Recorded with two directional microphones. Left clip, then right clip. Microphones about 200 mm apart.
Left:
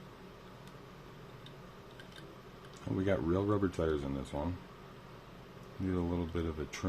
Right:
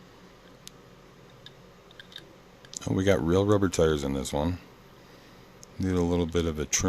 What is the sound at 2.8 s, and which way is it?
Speech, 50° right (ahead or behind).